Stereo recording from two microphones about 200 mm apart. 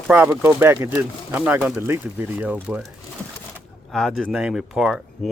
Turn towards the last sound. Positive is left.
turn(degrees=0)  # may be behind; listen again after turning